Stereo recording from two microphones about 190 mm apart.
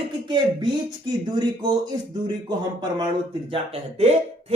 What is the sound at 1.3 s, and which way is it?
Speech, 20° right (ahead or behind).